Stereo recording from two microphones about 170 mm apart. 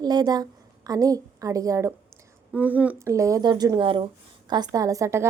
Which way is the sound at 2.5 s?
10° right (ahead or behind).